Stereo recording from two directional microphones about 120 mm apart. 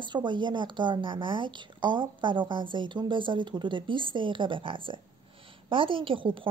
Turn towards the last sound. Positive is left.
turn(degrees=-45)  # may be behind; listen again after turning